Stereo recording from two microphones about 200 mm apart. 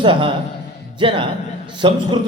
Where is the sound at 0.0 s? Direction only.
25° right (ahead or behind).